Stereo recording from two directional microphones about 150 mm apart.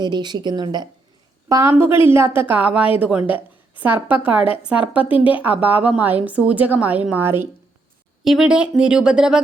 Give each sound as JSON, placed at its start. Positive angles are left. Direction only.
{"t": 0.0, "sound": "a woman's voice", "side_deg": -30}
{"t": 5.0, "sound": "speech", "side_deg": 35}
{"t": 5.3, "sound": "a woman's voice", "side_deg": -10}
{"t": 8.2, "sound": "speech", "side_deg": -5}